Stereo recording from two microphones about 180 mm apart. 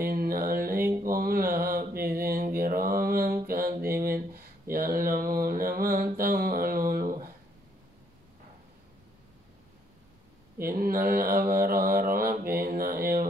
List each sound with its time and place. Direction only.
0.0 s music: 55° right (ahead or behind)
1.0 s mantra: 50° right (ahead or behind)
3.4 s music: 50° right (ahead or behind)
4.0 s a sound: 55° right (ahead or behind)
10.6 s mantra: 55° right (ahead or behind)